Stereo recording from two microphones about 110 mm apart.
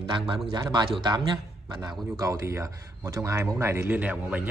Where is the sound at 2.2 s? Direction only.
25° right (ahead or behind).